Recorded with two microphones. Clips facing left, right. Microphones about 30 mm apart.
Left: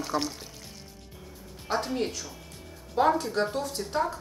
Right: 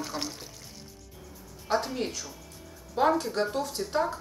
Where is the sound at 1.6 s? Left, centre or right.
Centre.